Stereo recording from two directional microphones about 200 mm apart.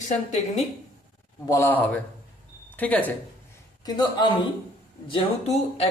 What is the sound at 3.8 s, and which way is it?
Speech, 20° left (ahead or behind).